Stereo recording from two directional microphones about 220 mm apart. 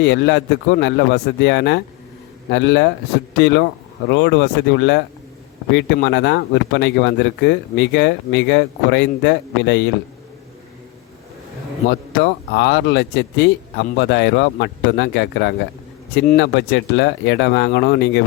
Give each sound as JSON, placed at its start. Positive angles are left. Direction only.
{"t": 0.0, "sound": "speech", "side_deg": 50}
{"t": 11.9, "sound": "speech", "side_deg": 50}